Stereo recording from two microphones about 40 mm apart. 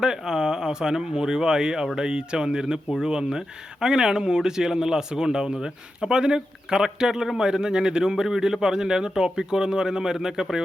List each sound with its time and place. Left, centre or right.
0.0 s speech: centre